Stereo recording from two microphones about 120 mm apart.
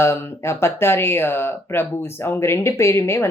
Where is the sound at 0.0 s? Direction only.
20° left (ahead or behind).